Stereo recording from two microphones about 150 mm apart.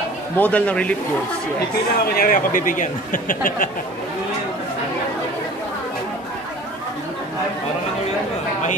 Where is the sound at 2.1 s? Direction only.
70° left (ahead or behind).